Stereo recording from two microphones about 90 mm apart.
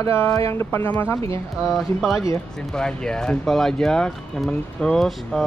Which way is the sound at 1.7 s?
Centre (ahead or behind).